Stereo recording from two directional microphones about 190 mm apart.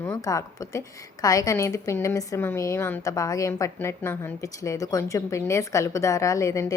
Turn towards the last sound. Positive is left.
turn(degrees=15)  # may be behind; listen again after turning